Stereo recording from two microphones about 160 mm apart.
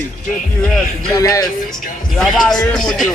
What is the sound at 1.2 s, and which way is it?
Speech, 20° left (ahead or behind).